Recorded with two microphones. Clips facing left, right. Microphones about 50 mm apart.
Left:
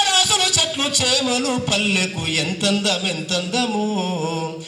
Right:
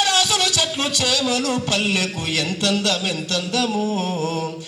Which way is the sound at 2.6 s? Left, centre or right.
Centre.